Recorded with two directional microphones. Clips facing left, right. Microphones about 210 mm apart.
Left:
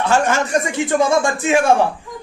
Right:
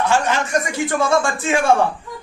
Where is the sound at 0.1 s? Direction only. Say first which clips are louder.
Left 2 dB; 40° left (ahead or behind).